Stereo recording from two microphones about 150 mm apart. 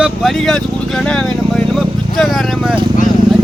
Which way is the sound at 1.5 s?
Centre (ahead or behind).